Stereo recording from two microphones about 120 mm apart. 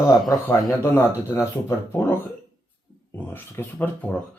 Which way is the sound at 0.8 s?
20° left (ahead or behind).